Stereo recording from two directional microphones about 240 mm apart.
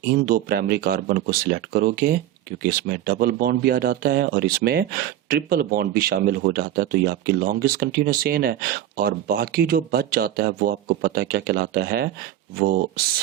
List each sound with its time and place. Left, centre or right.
0.3 s speech: right